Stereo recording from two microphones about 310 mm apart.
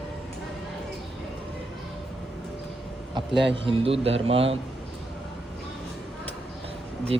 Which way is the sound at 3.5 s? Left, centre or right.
Centre.